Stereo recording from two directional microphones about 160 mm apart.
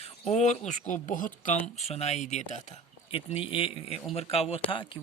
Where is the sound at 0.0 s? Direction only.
45° left (ahead or behind).